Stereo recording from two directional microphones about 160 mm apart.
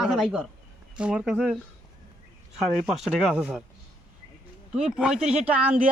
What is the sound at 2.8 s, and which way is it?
Speech, 5° right (ahead or behind).